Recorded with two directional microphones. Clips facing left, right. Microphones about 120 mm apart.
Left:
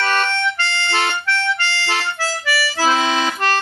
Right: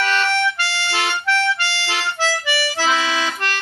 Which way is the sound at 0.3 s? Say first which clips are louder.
Right 1 dB; 10° right (ahead or behind).